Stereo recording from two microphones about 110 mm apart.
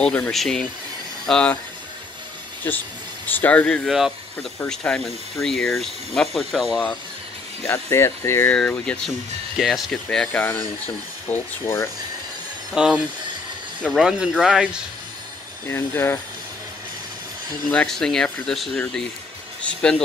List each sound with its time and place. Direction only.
0.0 s speech: 10° left (ahead or behind)
2.6 s speech: 20° left (ahead or behind)
3.9 s speech: 5° right (ahead or behind)
4.6 s speech: 10° left (ahead or behind)
7.6 s speech: 25° left (ahead or behind)
8.9 s speech: 10° left (ahead or behind)
9.6 s speech: centre (ahead or behind)
11.2 s speech: 20° left (ahead or behind)
12.7 s speech: 5° right (ahead or behind)
15.6 s speech: 20° left (ahead or behind)
17.6 s speech: 5° left (ahead or behind)